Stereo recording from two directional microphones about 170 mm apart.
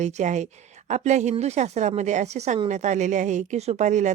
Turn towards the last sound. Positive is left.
turn(degrees=-45)  # may be behind; listen again after turning